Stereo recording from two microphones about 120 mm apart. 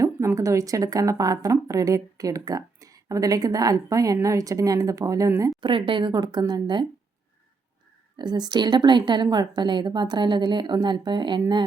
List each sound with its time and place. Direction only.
0.0 s a woman's voice: 25° right (ahead or behind)
5.6 s a woman's voice: 45° right (ahead or behind)
8.1 s a woman's voice: 35° right (ahead or behind)